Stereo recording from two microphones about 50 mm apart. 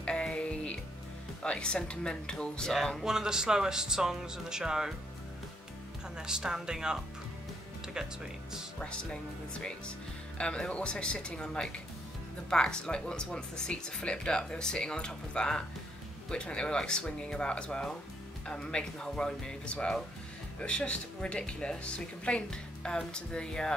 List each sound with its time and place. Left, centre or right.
0.0 s music: centre
1.4 s speech: centre
3.0 s speech: centre
6.1 s speech: centre
8.7 s speech: centre